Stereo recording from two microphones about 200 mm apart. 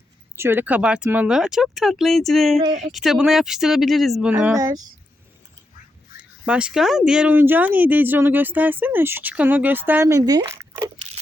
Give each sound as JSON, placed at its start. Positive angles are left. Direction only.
{"t": 0.3, "sound": "speech", "side_deg": -10}
{"t": 2.6, "sound": "speech", "side_deg": -35}
{"t": 2.9, "sound": "speech", "side_deg": 0}
{"t": 4.5, "sound": "speech", "side_deg": -15}
{"t": 6.1, "sound": "speech", "side_deg": -5}